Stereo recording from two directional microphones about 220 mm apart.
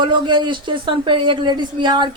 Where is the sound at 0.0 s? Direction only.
20° right (ahead or behind).